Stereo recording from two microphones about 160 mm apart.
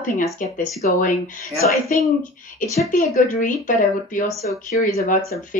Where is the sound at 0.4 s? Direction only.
55° left (ahead or behind).